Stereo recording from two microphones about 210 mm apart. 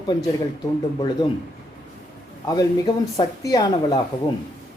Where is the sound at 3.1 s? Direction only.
15° left (ahead or behind).